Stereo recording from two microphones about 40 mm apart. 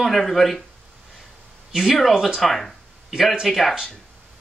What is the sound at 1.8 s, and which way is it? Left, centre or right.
Speech, centre.